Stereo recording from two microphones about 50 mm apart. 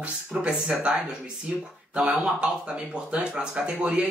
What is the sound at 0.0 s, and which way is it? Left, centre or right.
Speech, right.